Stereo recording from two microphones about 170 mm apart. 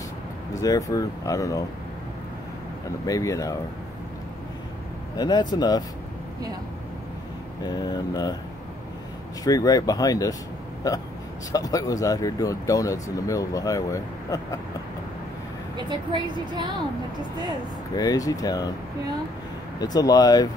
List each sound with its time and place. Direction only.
0.6 s speech: 20° left (ahead or behind)
3.1 s speech: 20° left (ahead or behind)
5.1 s speech: 25° left (ahead or behind)
7.6 s speech: 25° left (ahead or behind)
9.4 s speech: 20° left (ahead or behind)
16.1 s speech: 25° right (ahead or behind)
17.9 s speech: 20° left (ahead or behind)
19.8 s speech: 20° left (ahead or behind)